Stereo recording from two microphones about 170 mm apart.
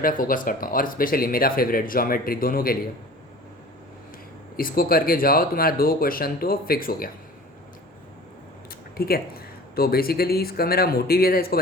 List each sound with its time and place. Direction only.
0.0 s speech: 55° left (ahead or behind)
4.5 s speech: 60° left (ahead or behind)
9.0 s speech: 65° left (ahead or behind)